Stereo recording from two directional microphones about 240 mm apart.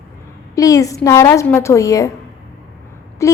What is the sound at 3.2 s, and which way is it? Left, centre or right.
Speech, centre.